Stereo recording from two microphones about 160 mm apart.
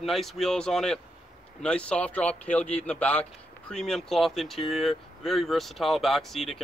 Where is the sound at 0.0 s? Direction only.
Centre (ahead or behind).